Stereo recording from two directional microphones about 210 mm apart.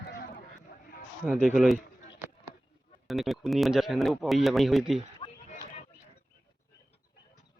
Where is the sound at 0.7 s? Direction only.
45° left (ahead or behind).